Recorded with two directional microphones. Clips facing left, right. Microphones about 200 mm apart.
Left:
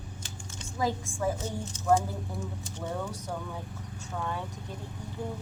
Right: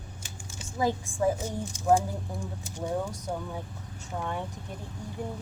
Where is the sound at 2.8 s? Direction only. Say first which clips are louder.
Right 4 dB; 10° right (ahead or behind).